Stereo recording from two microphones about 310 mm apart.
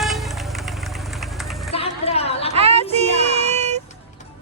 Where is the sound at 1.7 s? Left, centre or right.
Centre.